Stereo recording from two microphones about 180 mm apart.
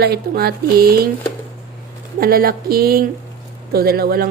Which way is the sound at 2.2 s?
55° right (ahead or behind).